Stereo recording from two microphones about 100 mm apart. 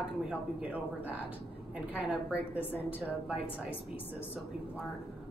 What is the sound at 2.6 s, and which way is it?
Speech, 20° left (ahead or behind).